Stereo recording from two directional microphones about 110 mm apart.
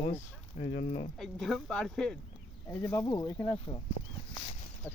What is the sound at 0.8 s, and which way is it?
Speech, 90° left.